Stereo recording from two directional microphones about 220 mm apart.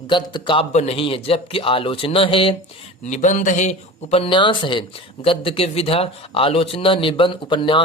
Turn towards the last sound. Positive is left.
turn(degrees=20)  # may be behind; listen again after turning